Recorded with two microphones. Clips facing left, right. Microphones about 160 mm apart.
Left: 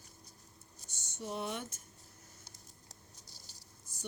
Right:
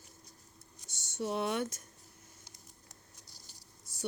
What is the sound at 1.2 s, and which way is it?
Speech, 75° right (ahead or behind).